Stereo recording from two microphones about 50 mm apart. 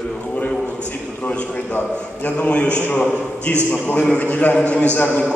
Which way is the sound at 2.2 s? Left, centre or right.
Left.